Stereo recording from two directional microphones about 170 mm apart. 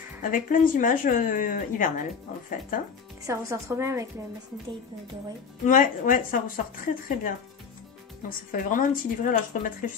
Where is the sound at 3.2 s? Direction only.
15° right (ahead or behind).